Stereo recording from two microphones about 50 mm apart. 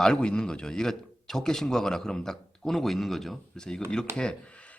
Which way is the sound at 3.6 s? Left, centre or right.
Centre.